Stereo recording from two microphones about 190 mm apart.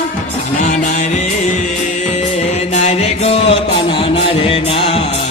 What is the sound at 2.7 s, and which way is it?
Music, 35° left (ahead or behind).